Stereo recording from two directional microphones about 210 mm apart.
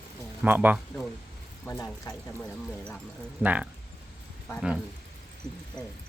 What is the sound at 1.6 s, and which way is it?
Speech, 15° left (ahead or behind).